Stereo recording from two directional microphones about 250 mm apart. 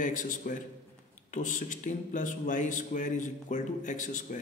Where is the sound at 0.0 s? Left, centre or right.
Left.